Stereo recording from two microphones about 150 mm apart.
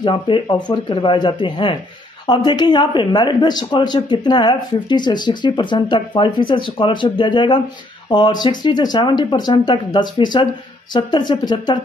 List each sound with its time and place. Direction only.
0.0 s speech: 30° left (ahead or behind)